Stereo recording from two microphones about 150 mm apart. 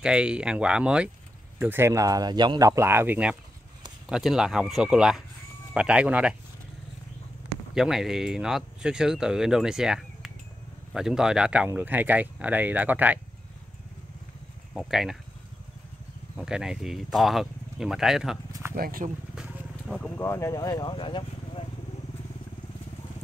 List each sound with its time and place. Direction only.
0.0 s speech: 5° right (ahead or behind)
7.7 s speech: 5° right (ahead or behind)
14.7 s speech: 5° right (ahead or behind)
16.3 s speech: 5° right (ahead or behind)
18.5 s a sound: 15° right (ahead or behind)
18.8 s speech: 70° right (ahead or behind)
19.3 s wild animals: 5° right (ahead or behind)
20.2 s speech: 20° left (ahead or behind); by 21.6 s 35° left (ahead or behind)